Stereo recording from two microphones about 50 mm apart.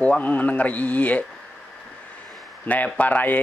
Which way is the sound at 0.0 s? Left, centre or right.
Left.